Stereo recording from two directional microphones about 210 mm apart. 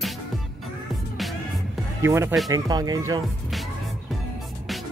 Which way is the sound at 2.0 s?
15° right (ahead or behind).